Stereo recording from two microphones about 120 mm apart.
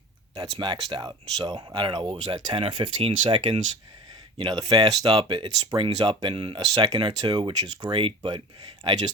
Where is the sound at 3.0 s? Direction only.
55° right (ahead or behind).